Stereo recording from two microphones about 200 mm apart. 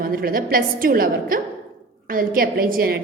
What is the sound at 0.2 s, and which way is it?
A woman's voice, 45° right (ahead or behind).